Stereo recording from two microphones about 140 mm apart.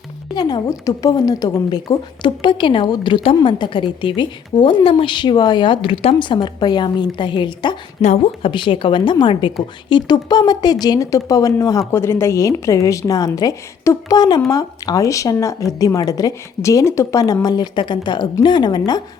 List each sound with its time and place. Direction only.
0.3 s a woman's voice: 30° left (ahead or behind)
8.0 s a woman's voice: 45° left (ahead or behind); by 19.0 s 30° left (ahead or behind)